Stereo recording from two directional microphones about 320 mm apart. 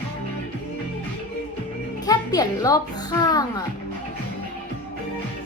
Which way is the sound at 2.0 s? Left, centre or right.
Centre.